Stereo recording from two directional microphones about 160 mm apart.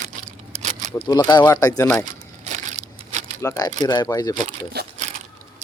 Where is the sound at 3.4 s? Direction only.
20° left (ahead or behind).